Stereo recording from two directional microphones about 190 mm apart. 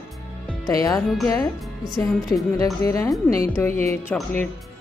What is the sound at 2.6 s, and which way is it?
A woman's voice, 15° left (ahead or behind).